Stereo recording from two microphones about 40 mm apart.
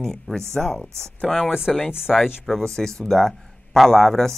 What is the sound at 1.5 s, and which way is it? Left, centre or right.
Speech, centre.